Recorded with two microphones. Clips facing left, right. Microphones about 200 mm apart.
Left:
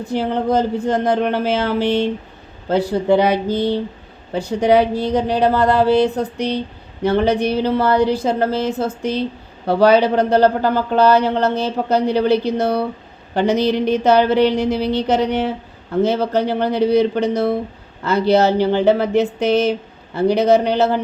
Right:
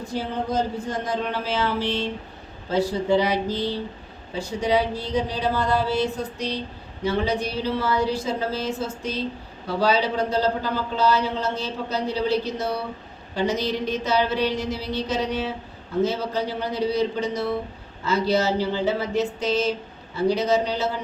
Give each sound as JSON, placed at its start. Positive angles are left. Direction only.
{"t": 0.1, "sound": "a man's voice", "side_deg": 65}